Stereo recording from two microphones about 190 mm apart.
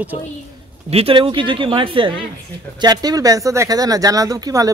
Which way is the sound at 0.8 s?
30° right (ahead or behind).